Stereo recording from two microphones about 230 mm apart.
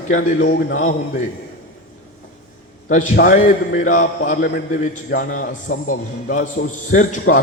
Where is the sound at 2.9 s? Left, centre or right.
Left.